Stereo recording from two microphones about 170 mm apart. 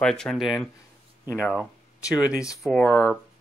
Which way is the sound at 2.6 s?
10° left (ahead or behind).